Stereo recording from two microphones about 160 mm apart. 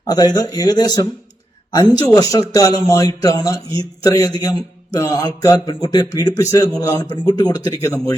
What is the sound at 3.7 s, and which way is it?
Speech, 35° right (ahead or behind).